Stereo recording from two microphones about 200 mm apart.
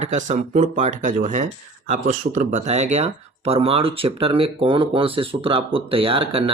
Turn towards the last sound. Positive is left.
turn(degrees=-25)  # may be behind; listen again after turning